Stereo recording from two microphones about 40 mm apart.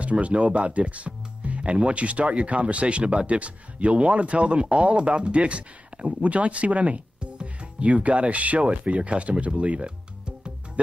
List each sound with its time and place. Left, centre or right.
0.0 s speech: right